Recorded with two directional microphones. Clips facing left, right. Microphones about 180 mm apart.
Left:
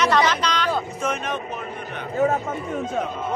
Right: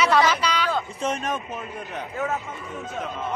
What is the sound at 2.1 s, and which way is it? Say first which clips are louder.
Speech: left 8 dB; 35° left (ahead or behind).